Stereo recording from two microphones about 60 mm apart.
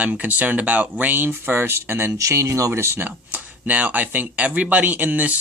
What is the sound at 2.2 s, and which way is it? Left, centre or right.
Speech, right.